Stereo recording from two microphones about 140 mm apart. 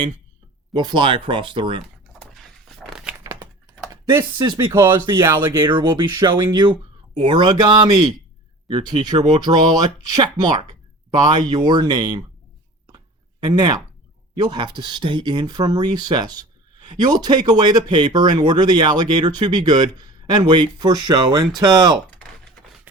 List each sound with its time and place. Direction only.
0.7 s speech: 30° right (ahead or behind)
2.1 s a sound: centre (ahead or behind)
4.1 s speech: 25° right (ahead or behind)
13.4 s speech: 30° right (ahead or behind)